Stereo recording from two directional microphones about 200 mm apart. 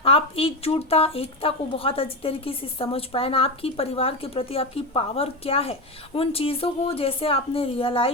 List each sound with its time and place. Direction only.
0.0 s speech: 30° left (ahead or behind)